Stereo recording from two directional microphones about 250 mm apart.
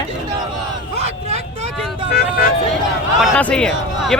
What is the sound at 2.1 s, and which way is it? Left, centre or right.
Vehicle, left.